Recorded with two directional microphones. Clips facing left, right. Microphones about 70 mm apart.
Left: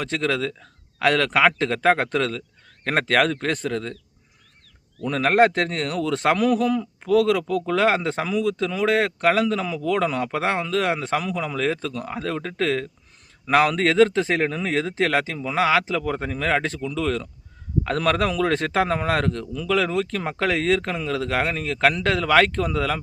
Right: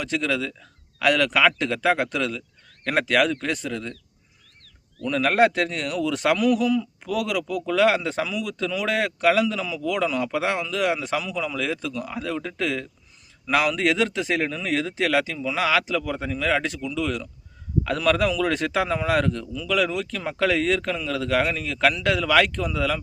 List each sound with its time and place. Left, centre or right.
0.0 s speech: left
5.0 s speech: left